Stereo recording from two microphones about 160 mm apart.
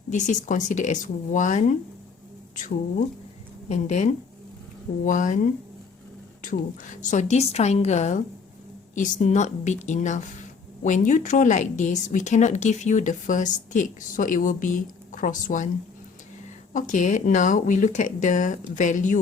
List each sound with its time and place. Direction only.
0.1 s a woman's voice: 50° left (ahead or behind)
3.7 s a woman's voice: 45° left (ahead or behind)
16.7 s a woman's voice: 50° left (ahead or behind)